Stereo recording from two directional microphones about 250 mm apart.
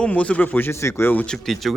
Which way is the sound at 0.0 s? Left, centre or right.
Centre.